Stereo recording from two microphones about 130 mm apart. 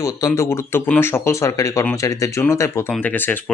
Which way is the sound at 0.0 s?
25° left (ahead or behind).